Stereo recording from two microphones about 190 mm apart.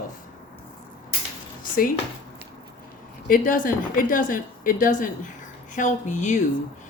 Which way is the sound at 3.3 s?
45° left (ahead or behind).